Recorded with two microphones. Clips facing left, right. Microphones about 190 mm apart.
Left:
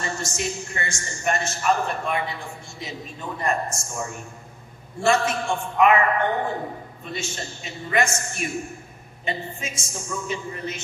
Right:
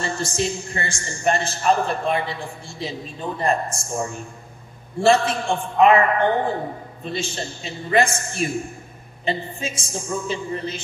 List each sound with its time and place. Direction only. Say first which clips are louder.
0.0 s a man's voice: right 4 dB; 30° right (ahead or behind)